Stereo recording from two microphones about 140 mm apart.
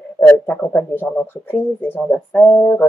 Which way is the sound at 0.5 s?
15° left (ahead or behind).